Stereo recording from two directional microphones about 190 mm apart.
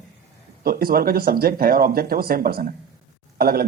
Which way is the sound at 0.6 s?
55° right (ahead or behind).